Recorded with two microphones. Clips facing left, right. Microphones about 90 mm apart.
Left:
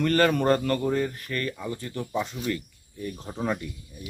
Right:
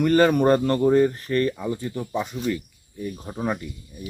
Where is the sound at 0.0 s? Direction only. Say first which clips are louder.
Right 4 dB; 15° right (ahead or behind).